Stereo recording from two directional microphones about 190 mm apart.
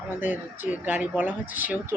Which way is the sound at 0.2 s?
10° right (ahead or behind).